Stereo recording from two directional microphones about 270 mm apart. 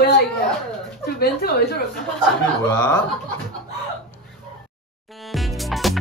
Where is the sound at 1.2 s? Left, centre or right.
Left.